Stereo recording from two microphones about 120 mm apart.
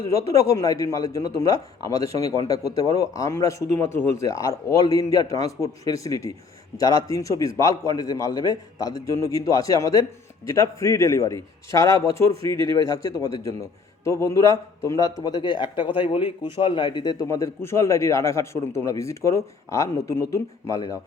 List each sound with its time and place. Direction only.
0.0 s a man's voice: 25° left (ahead or behind)
17.2 s a man's voice: 20° left (ahead or behind)